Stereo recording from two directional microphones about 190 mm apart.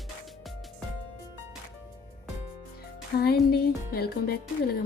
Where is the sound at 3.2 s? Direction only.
55° left (ahead or behind).